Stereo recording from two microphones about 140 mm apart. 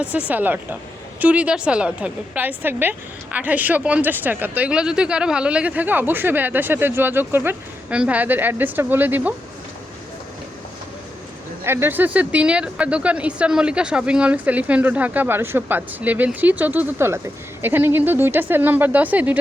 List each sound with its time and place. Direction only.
0.0 s speech: 10° right (ahead or behind)
11.6 s speech: 15° right (ahead or behind)